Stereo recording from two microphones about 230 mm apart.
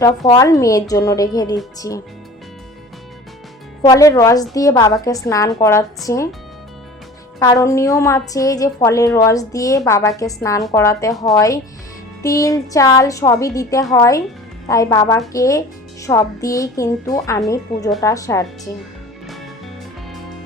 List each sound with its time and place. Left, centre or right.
0.3 s a woman's voice: centre
3.8 s a woman's voice: centre
7.3 s a woman's voice: centre